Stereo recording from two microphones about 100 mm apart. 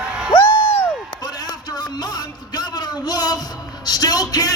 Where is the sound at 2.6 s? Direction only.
40° left (ahead or behind).